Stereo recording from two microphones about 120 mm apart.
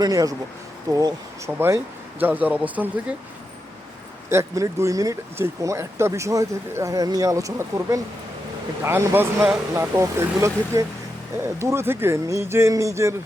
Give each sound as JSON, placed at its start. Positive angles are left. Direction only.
{"t": 0.0, "sound": "speech", "side_deg": -30}
{"t": 1.5, "sound": "speech", "side_deg": -20}
{"t": 4.3, "sound": "speech", "side_deg": -25}